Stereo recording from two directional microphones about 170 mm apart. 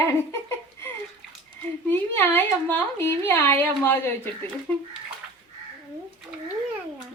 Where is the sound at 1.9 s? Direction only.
10° left (ahead or behind).